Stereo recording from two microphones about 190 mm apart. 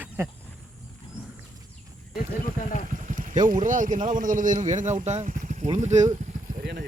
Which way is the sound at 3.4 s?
45° right (ahead or behind).